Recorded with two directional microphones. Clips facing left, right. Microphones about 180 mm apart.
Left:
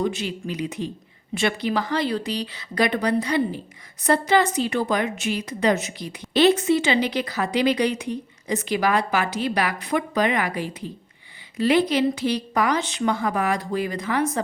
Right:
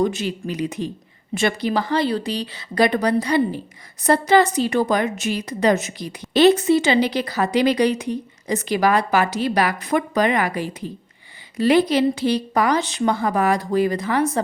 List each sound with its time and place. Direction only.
0.0 s a woman's voice: 45° right (ahead or behind)